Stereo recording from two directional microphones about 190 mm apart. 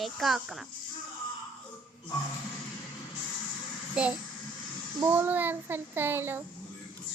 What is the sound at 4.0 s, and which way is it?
A child's voice, 5° right (ahead or behind).